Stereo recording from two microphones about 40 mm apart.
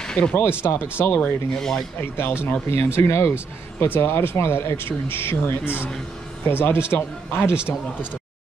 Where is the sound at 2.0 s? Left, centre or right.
Left.